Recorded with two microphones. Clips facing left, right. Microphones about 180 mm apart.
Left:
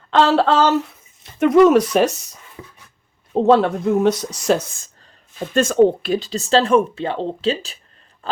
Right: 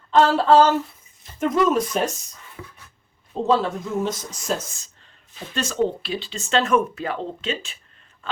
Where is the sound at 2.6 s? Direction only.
20° left (ahead or behind).